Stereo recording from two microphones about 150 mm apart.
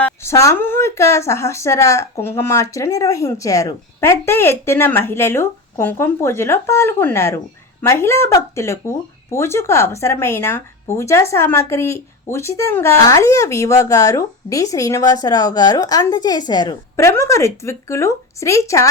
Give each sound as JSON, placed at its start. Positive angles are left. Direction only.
{"t": 0.0, "sound": "speech", "side_deg": 15}